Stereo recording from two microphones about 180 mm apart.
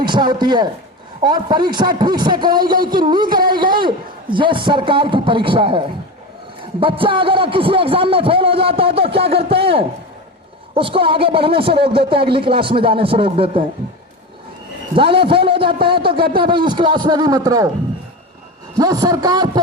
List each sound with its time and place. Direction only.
0.0 s a man's voice: 25° right (ahead or behind)
3.2 s speech: 55° right (ahead or behind)
3.5 s a man's voice: 25° right (ahead or behind)
14.9 s a man's voice: 30° right (ahead or behind)
18.8 s a man's voice: 20° right (ahead or behind)